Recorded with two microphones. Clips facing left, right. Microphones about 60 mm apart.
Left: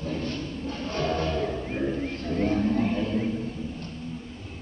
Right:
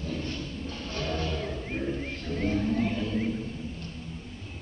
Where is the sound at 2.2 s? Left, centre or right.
Left.